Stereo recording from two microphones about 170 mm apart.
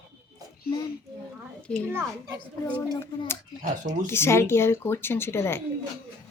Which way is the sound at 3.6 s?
45° right (ahead or behind).